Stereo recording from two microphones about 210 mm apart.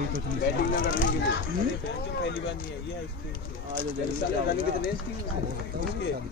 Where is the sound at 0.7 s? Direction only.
40° left (ahead or behind).